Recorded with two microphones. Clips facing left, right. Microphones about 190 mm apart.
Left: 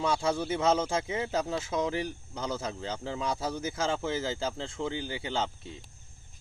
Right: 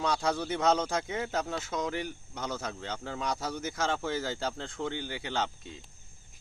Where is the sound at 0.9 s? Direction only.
25° left (ahead or behind).